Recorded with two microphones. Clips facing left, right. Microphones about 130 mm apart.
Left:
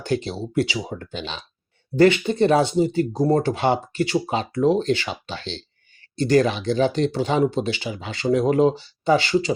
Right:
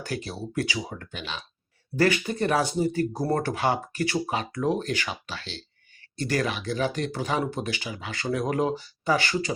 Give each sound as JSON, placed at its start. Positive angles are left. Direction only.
{"t": 0.0, "sound": "speech", "side_deg": 25}